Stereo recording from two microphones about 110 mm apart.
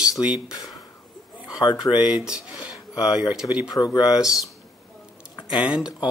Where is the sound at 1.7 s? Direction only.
5° right (ahead or behind).